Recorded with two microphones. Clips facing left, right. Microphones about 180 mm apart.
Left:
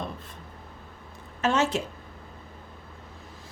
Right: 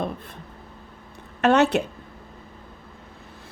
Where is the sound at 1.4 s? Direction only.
65° right (ahead or behind).